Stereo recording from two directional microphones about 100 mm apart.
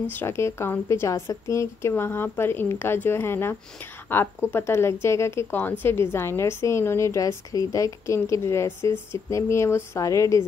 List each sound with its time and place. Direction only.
0.1 s a woman's voice: 25° left (ahead or behind)